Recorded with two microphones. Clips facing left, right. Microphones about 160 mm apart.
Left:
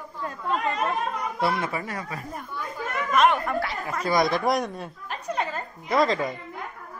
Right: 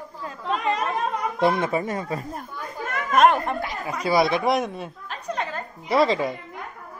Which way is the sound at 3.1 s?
45° right (ahead or behind).